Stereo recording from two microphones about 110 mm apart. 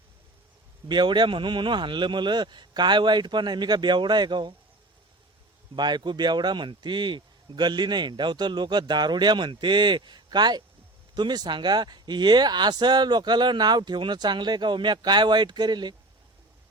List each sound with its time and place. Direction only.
0.9 s a man's voice: 45° right (ahead or behind)
5.7 s a man's voice: 40° right (ahead or behind)